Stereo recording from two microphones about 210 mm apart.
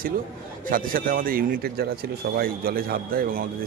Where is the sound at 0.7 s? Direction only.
40° right (ahead or behind).